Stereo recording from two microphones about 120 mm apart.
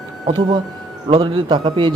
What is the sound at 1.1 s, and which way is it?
Speech, 40° right (ahead or behind).